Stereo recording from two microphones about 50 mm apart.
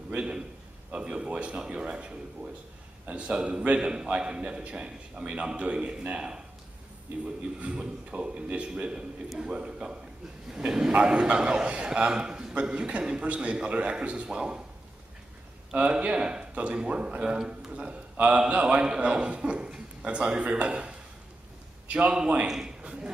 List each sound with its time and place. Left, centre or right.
0.2 s a man's voice: centre
15.7 s a man's voice: right
22.5 s a sound: centre